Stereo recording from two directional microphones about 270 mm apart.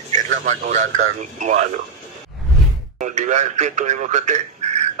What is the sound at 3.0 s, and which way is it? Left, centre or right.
Speech, right.